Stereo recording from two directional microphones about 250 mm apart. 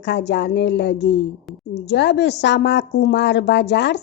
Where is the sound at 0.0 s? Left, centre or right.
Left.